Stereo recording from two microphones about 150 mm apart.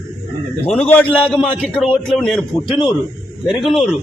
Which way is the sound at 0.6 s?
5° left (ahead or behind).